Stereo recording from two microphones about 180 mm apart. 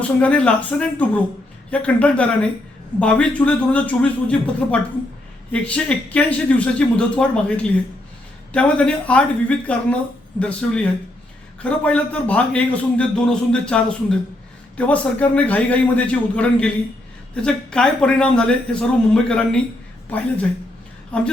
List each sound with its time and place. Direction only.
0.0 s a man's voice: 5° left (ahead or behind)